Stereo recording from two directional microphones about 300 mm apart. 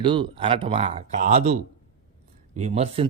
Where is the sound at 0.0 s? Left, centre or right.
Centre.